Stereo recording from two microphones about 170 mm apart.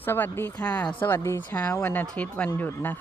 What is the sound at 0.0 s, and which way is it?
Speech, 10° left (ahead or behind).